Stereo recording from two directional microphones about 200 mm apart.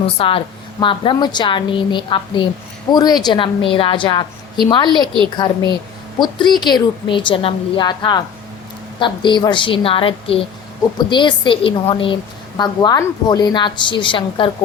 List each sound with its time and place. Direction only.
0.2 s a woman's voice: 25° left (ahead or behind)